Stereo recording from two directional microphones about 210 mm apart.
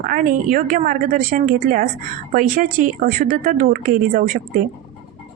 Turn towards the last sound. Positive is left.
turn(degrees=-40)  # may be behind; listen again after turning